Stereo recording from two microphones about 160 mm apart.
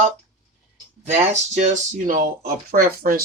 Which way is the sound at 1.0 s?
45° right (ahead or behind).